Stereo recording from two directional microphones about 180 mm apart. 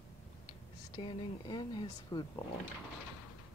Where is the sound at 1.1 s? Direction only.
25° left (ahead or behind).